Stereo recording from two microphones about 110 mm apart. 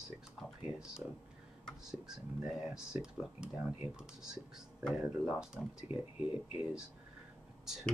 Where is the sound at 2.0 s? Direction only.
5° right (ahead or behind).